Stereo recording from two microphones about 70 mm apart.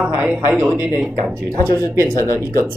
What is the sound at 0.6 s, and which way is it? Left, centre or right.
Speech, right.